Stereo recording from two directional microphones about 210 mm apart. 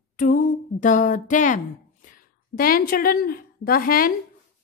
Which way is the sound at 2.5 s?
45° left (ahead or behind).